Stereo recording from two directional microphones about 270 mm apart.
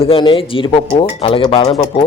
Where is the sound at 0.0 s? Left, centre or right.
Centre.